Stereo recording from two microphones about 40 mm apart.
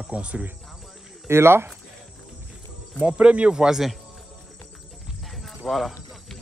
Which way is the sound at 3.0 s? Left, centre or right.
Right.